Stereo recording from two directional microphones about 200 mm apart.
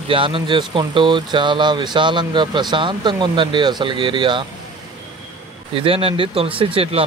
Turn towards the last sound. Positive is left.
turn(degrees=-30)  # may be behind; listen again after turning